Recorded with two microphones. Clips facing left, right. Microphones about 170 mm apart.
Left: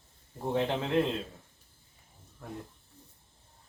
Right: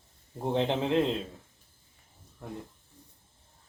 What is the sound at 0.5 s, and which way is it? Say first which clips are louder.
Speech: right 2 dB; 20° right (ahead or behind).